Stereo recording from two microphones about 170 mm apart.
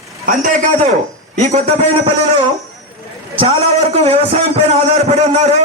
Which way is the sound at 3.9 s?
35° right (ahead or behind).